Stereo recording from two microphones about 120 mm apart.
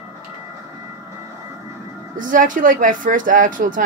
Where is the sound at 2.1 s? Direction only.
90° right.